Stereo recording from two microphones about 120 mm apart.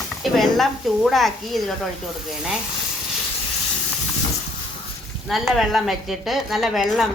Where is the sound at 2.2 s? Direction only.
5° right (ahead or behind).